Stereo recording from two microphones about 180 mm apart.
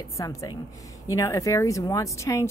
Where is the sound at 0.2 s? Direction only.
20° left (ahead or behind).